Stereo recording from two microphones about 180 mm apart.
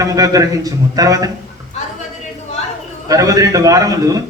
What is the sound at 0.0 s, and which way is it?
A man's voice, 20° right (ahead or behind).